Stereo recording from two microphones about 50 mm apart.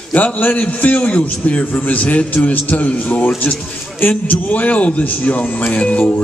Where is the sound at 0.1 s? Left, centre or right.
Left.